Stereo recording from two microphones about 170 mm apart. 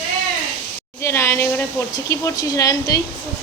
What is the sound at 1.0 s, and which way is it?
Speech, 15° left (ahead or behind).